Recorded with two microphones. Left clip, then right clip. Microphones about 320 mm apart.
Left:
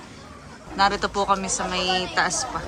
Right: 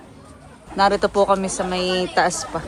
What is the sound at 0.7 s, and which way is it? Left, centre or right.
Speech, centre.